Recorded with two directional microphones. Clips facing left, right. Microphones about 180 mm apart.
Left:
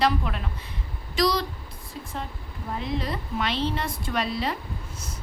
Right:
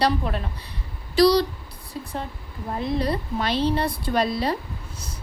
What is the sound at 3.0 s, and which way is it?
A woman's voice, 40° right (ahead or behind).